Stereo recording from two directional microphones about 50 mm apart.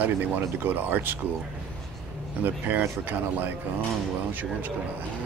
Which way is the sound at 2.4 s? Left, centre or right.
Right.